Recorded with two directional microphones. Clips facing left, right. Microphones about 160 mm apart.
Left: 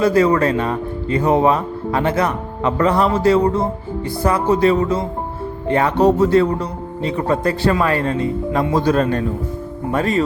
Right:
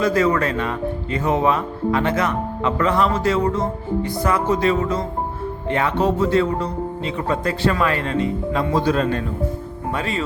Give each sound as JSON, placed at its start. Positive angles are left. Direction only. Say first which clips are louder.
{"t": 0.0, "sound": "speech", "louder": "left 4 dB", "side_deg": 30}